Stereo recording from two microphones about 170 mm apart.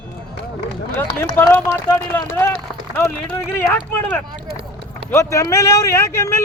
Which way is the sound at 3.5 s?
10° left (ahead or behind).